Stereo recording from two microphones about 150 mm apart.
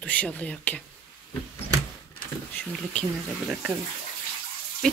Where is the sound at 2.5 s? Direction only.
5° left (ahead or behind).